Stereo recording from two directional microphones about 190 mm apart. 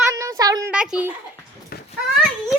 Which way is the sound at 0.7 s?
5° right (ahead or behind).